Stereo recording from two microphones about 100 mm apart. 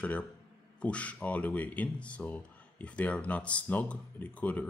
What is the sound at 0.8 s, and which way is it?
Speech, 15° left (ahead or behind).